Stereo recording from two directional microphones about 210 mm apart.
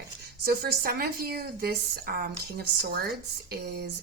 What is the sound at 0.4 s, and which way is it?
A woman's voice, 45° right (ahead or behind).